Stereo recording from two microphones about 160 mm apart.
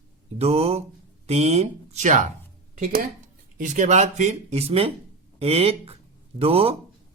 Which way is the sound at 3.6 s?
50° right (ahead or behind).